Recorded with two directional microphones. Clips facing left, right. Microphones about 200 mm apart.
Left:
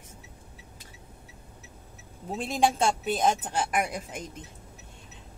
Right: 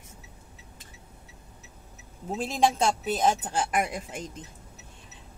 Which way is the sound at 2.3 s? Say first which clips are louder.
Right 1 dB; centre (ahead or behind).